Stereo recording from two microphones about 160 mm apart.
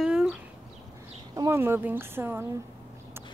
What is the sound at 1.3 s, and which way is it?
Speech, 20° right (ahead or behind).